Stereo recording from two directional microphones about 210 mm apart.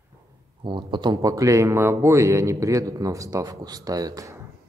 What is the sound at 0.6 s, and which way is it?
A man's voice, 20° right (ahead or behind).